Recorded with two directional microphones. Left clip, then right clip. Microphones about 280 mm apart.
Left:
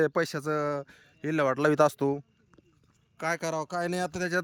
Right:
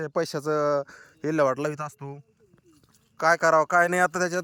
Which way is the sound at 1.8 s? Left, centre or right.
Left.